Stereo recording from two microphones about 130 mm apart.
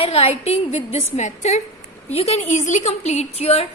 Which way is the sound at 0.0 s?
50° left (ahead or behind).